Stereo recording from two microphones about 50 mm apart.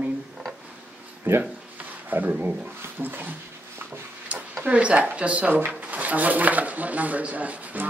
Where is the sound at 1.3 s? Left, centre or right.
Right.